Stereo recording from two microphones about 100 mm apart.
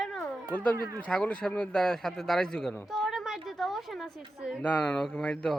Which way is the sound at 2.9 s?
Centre (ahead or behind).